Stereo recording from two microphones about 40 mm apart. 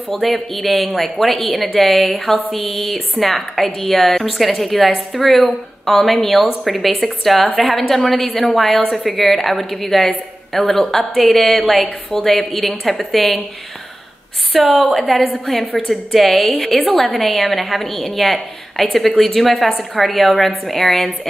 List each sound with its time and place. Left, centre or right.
0.1 s a woman's voice: centre
14.5 s a woman's voice: centre
17.3 s a woman's voice: centre
17.6 s a woman's voice: centre